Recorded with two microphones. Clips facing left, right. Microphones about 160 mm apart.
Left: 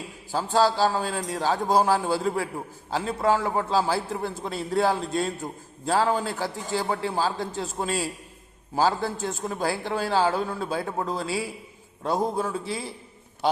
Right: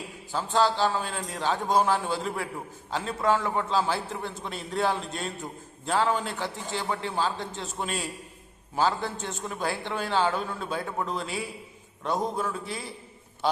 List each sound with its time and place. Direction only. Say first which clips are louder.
0.3 s a man's voice: left 3 dB; 35° left (ahead or behind)